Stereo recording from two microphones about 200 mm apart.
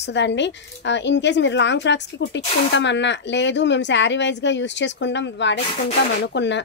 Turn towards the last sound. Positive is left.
turn(degrees=60)  # may be behind; listen again after turning